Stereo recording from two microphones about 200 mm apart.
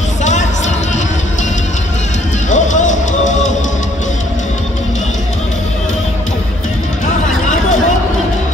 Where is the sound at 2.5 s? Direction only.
40° left (ahead or behind).